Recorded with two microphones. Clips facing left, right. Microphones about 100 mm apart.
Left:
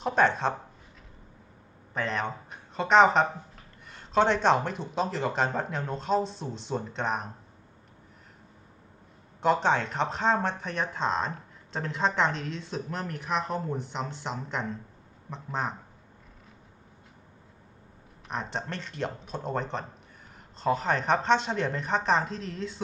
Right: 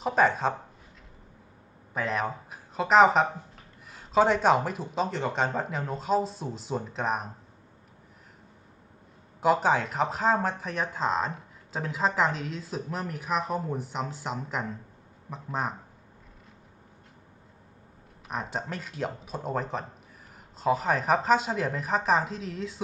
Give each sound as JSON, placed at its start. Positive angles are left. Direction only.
{"t": 0.0, "sound": "speech", "side_deg": 0}
{"t": 1.9, "sound": "speech", "side_deg": -5}
{"t": 9.4, "sound": "speech", "side_deg": -5}
{"t": 18.3, "sound": "speech", "side_deg": -5}